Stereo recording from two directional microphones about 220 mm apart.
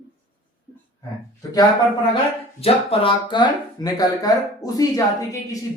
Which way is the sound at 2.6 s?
25° left (ahead or behind).